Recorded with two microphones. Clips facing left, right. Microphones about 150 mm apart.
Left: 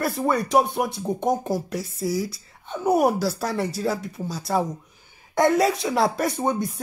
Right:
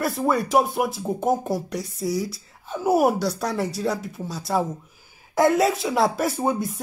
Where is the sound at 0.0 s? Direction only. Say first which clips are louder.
Right 1 dB; centre (ahead or behind).